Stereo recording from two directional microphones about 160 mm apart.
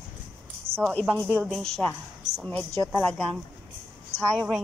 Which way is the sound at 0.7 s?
35° right (ahead or behind).